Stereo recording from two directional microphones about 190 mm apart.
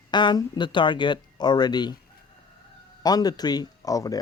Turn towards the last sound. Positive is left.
turn(degrees=20)  # may be behind; listen again after turning